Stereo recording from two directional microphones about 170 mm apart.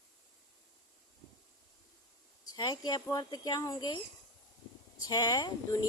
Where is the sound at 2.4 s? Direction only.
20° left (ahead or behind).